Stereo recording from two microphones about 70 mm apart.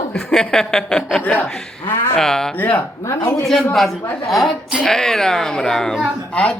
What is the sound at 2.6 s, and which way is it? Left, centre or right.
Speech, left.